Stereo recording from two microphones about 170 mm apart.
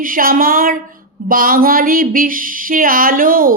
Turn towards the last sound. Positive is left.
turn(degrees=-55)  # may be behind; listen again after turning